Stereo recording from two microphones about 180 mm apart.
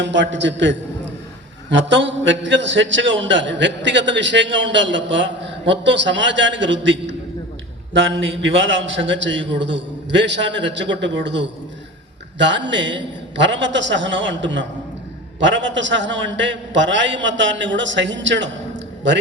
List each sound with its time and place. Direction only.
0.0 s a man's voice: 85° right